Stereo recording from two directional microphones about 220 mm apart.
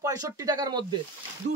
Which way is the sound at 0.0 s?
15° right (ahead or behind).